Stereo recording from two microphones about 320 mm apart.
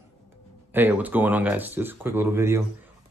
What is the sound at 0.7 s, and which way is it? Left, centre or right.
Speech, centre.